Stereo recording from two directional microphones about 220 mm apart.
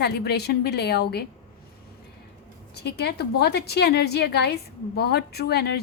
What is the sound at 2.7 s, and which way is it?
A woman's voice, 50° left (ahead or behind).